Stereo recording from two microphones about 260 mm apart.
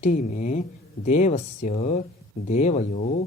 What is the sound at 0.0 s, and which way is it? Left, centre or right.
Speech, left.